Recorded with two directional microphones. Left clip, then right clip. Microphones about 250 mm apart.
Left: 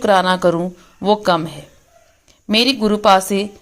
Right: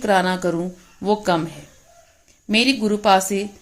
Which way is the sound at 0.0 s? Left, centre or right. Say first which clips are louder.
Left 5 dB; centre.